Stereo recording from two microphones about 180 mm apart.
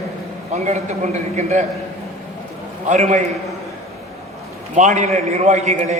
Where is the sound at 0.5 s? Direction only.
40° right (ahead or behind).